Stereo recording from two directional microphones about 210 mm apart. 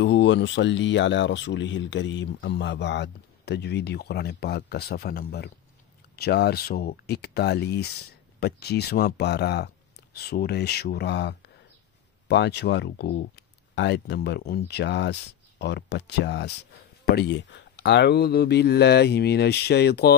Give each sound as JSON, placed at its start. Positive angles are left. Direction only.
{"t": 0.0, "sound": "speech", "side_deg": 60}